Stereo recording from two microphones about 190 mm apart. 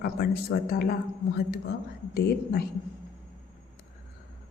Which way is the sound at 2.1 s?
55° left (ahead or behind).